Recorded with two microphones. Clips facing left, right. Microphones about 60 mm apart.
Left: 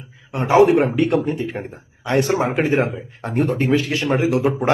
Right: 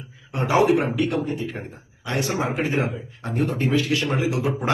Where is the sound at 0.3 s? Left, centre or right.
Left.